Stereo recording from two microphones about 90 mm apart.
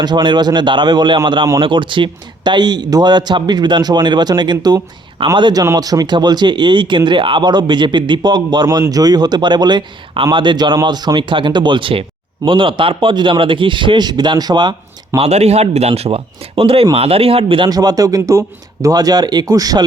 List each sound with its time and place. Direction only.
0.0 s speech: 55° right (ahead or behind)
5.7 s speech: 45° right (ahead or behind)
15.1 s speech: 30° right (ahead or behind)
15.9 s speech: 90° right
17.7 s speech: 45° right (ahead or behind)